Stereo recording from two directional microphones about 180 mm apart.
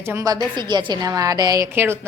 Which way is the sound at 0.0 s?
15° right (ahead or behind).